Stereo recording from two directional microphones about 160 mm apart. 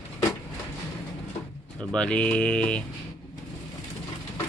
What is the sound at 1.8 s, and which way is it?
Speech, 5° left (ahead or behind).